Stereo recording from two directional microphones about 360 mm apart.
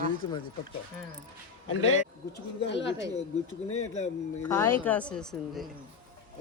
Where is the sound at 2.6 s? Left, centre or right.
Left.